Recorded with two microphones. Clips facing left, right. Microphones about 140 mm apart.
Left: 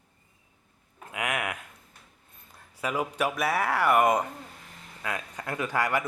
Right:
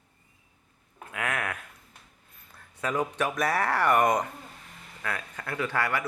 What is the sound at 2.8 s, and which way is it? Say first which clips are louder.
Speech: even; 10° left (ahead or behind).